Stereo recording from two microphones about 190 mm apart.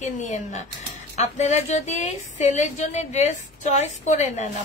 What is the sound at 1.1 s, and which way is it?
A woman's voice, 35° left (ahead or behind).